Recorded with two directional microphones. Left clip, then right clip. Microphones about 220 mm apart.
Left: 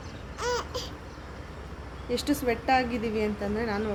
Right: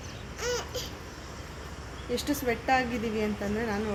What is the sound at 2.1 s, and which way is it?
A woman's voice, 5° left (ahead or behind).